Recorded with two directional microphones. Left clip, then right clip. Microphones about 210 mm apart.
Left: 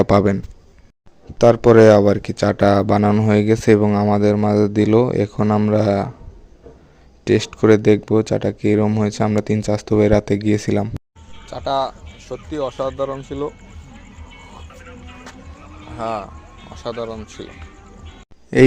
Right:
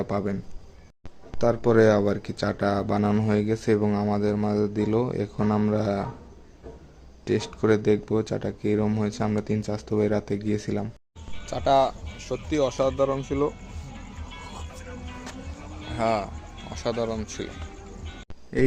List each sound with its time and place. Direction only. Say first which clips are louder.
0.0 s a man's voice: left 14 dB; 45° left (ahead or behind)
1.4 s speech: left 10 dB; 40° left (ahead or behind)
7.3 s speech: left 9 dB; 35° left (ahead or behind)
11.4 s speech: even; 15° right (ahead or behind)
15.9 s speech: even; 15° right (ahead or behind)
18.5 s speech: left 12 dB; 40° left (ahead or behind)